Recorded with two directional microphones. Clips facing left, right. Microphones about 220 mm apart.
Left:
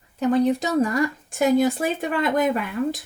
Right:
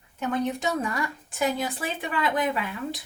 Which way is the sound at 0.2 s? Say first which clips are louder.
Left 8 dB; 35° left (ahead or behind).